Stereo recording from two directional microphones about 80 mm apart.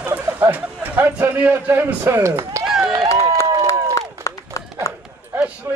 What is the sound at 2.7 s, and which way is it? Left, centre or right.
Run, centre.